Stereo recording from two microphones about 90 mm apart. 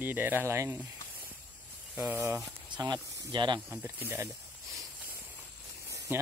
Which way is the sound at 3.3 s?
55° right (ahead or behind).